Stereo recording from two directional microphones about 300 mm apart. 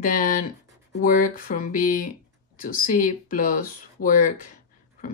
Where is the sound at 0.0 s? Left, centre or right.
Left.